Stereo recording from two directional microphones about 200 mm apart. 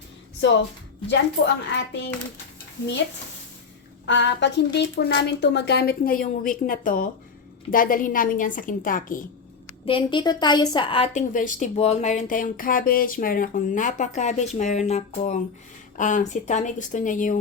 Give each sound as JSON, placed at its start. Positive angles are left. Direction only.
{"t": 0.4, "sound": "speech", "side_deg": 65}
{"t": 1.7, "sound": "speech", "side_deg": 60}
{"t": 4.0, "sound": "a woman's voice", "side_deg": 65}
{"t": 9.8, "sound": "a woman's voice", "side_deg": 25}
{"t": 11.3, "sound": "speech", "side_deg": 40}